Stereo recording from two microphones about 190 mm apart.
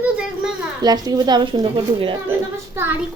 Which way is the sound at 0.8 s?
20° right (ahead or behind).